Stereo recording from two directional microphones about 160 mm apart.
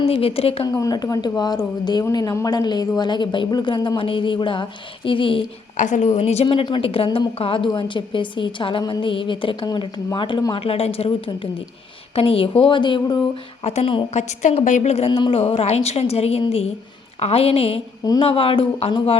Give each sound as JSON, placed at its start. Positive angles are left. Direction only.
{"t": 0.0, "sound": "a woman's voice", "side_deg": 35}
{"t": 0.7, "sound": "speech", "side_deg": 25}
{"t": 5.7, "sound": "a woman's voice", "side_deg": 50}
{"t": 18.0, "sound": "speech", "side_deg": 25}
{"t": 18.3, "sound": "a woman's voice", "side_deg": 35}